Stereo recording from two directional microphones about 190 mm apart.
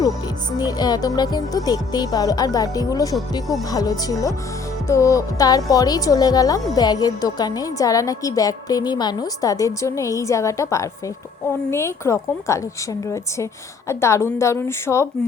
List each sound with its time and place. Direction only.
0.6 s a woman's voice: 20° left (ahead or behind)